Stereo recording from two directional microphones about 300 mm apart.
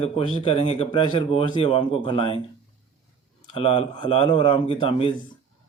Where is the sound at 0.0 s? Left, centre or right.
Centre.